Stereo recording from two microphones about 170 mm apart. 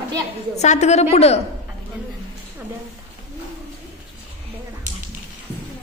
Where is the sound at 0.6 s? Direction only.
40° left (ahead or behind).